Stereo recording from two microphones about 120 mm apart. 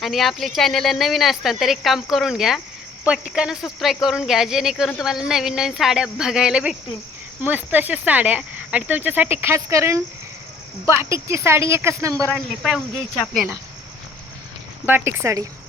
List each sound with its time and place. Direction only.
0.0 s speech: centre (ahead or behind); by 12.3 s 25° right (ahead or behind)
12.6 s speech: 5° right (ahead or behind)
14.8 s speech: 20° right (ahead or behind)